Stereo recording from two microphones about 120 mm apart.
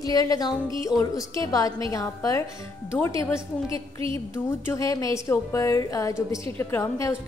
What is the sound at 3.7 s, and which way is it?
Music, 45° right (ahead or behind).